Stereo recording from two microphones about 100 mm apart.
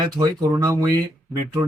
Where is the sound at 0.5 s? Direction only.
30° right (ahead or behind).